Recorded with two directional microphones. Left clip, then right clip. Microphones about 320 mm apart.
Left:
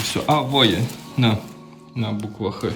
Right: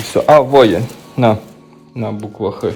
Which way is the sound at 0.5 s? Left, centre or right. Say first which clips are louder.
Right 9 dB; centre.